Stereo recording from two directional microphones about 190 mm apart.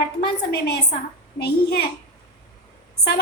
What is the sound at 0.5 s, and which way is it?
A woman's voice, 60° left (ahead or behind).